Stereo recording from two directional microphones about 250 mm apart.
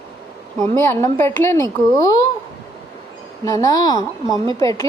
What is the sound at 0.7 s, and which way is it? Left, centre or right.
A woman's voice, centre.